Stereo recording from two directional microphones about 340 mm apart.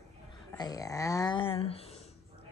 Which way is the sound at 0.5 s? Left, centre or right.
Centre.